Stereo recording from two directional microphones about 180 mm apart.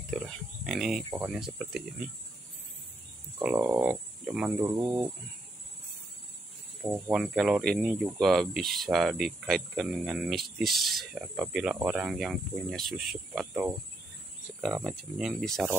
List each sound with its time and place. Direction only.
0.7 s speech: centre (ahead or behind)
3.4 s speech: 15° right (ahead or behind)
6.8 s speech: 10° right (ahead or behind)